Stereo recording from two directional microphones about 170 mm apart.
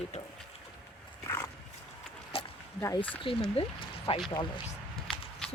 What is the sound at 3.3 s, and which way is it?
Speech, 30° left (ahead or behind).